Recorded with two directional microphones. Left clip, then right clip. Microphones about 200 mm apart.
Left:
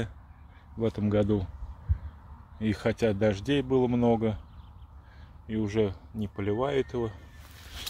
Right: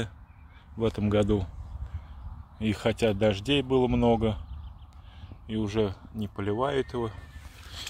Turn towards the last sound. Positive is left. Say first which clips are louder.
# even
turn(degrees=5)  # may be behind; listen again after turning